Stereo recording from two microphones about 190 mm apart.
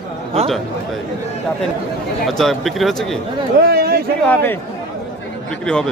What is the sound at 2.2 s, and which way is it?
Speech, centre (ahead or behind).